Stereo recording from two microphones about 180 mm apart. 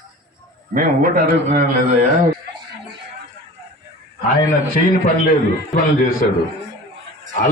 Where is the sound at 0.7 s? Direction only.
50° right (ahead or behind).